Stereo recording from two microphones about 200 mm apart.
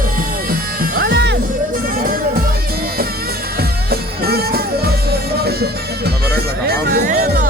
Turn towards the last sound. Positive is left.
turn(degrees=-45)  # may be behind; listen again after turning